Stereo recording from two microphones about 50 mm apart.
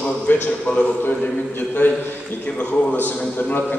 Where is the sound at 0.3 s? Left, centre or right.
Left.